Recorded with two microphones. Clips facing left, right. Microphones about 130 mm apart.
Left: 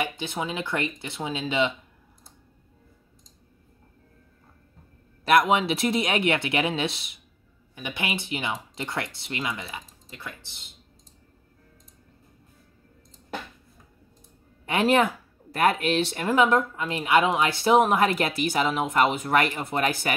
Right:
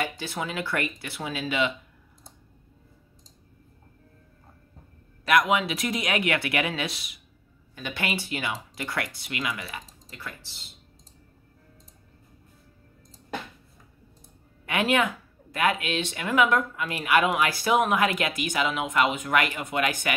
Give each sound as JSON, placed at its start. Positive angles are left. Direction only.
{"t": 0.0, "sound": "speech", "side_deg": 20}
{"t": 5.2, "sound": "speech", "side_deg": 30}
{"t": 7.7, "sound": "speech", "side_deg": 15}
{"t": 14.7, "sound": "speech", "side_deg": 35}